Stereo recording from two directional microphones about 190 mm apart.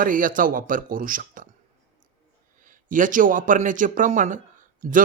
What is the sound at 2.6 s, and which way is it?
Speech, 45° right (ahead or behind).